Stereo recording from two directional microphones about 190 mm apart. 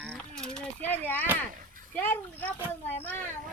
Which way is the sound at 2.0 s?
10° left (ahead or behind).